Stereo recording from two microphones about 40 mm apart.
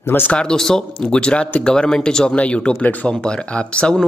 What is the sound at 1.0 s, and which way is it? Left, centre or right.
Speech, left.